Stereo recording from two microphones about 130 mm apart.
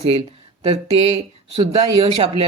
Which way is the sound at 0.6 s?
50° right (ahead or behind).